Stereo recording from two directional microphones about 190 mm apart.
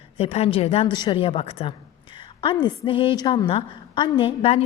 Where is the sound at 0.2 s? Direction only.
30° left (ahead or behind).